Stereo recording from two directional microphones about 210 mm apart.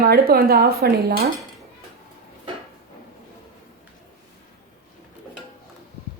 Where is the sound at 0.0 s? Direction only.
45° right (ahead or behind).